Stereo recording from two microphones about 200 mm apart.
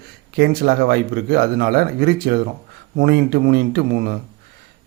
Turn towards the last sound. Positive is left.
turn(degrees=-50)  # may be behind; listen again after turning